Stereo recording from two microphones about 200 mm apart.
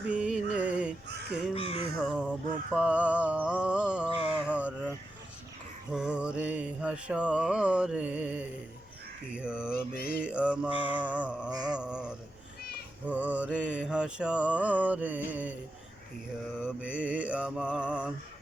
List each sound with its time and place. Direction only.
0.1 s music: 5° right (ahead or behind)
1.5 s crow: 30° left (ahead or behind)
2.0 s caw: 5° right (ahead or behind)
2.7 s mantra: 5° right (ahead or behind)
4.4 s a sound: 5° right (ahead or behind)
5.9 s mantra: 5° right (ahead or behind)
10.7 s mantra: 25° left (ahead or behind)
10.9 s mantra: 5° right (ahead or behind)
16.6 s mantra: 5° right (ahead or behind)